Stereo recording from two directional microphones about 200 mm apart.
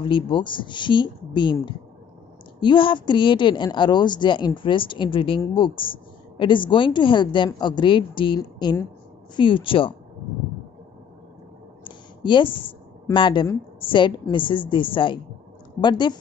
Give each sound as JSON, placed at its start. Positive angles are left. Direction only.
{"t": 0.0, "sound": "a woman's voice", "side_deg": 25}
{"t": 11.8, "sound": "a sound", "side_deg": 25}
{"t": 13.1, "sound": "a woman's voice", "side_deg": 25}